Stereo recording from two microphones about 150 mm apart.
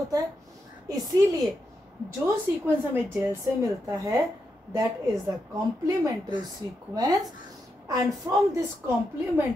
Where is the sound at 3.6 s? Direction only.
20° right (ahead or behind).